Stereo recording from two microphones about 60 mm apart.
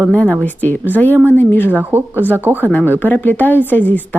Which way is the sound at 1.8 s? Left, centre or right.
Right.